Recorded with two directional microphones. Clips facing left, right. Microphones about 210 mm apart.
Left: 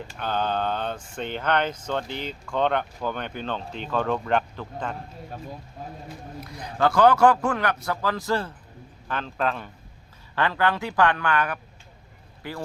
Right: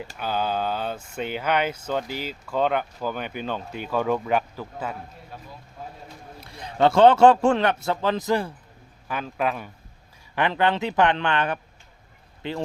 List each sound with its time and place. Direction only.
0.2 s speech: 5° right (ahead or behind)
6.4 s a man's voice: 25° right (ahead or behind)